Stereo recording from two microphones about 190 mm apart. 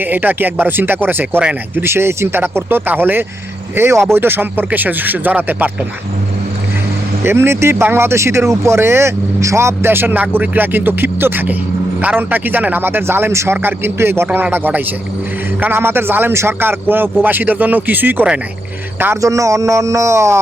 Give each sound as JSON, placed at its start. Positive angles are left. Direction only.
{"t": 0.1, "sound": "speech", "side_deg": -10}
{"t": 7.3, "sound": "speech", "side_deg": -15}